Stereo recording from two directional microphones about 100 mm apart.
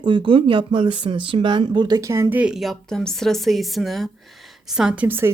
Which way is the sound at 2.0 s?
30° right (ahead or behind).